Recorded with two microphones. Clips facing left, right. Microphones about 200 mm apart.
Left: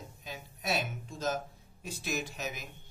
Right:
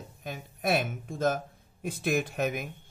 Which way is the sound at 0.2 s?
55° right (ahead or behind).